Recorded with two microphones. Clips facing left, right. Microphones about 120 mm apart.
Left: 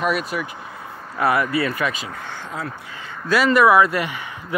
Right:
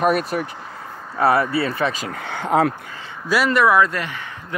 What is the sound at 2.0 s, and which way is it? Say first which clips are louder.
Speech: right 6 dB; 70° right (ahead or behind).